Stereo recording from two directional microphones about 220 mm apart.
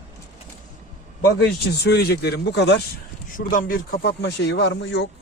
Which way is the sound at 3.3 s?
40° left (ahead or behind).